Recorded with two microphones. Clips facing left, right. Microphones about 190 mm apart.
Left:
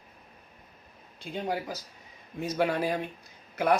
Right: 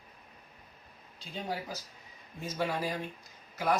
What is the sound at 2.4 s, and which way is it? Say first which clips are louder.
Speech: left 6 dB; 65° left (ahead or behind).